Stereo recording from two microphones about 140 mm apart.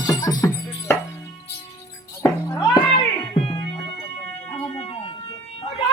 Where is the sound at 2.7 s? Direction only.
35° left (ahead or behind).